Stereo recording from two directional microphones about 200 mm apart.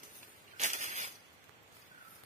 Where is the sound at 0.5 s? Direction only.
35° right (ahead or behind).